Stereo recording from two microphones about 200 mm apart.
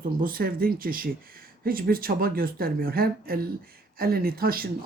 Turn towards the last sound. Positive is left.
turn(degrees=-45)  # may be behind; listen again after turning